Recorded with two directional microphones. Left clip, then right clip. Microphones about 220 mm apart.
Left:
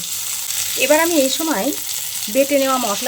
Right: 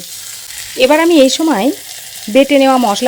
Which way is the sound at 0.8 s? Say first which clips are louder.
Right 7 dB; 45° right (ahead or behind).